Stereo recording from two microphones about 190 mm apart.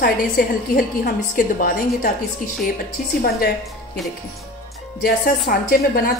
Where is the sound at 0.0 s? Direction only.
50° left (ahead or behind).